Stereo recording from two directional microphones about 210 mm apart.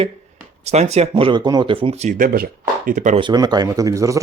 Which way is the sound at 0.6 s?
30° right (ahead or behind).